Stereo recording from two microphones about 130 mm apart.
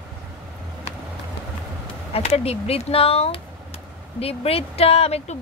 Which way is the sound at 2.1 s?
50° left (ahead or behind).